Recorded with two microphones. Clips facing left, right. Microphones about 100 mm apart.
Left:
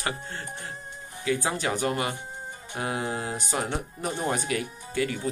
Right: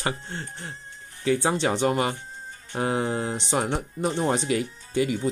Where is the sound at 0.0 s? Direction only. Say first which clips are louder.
Right 2 dB; 25° right (ahead or behind).